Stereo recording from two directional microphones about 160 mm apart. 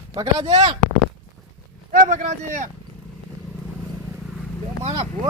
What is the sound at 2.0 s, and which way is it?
Speech, 50° right (ahead or behind).